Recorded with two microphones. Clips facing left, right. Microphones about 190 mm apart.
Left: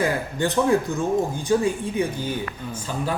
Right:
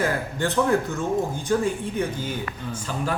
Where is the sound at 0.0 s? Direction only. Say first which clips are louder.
Left 2 dB; 15° left (ahead or behind).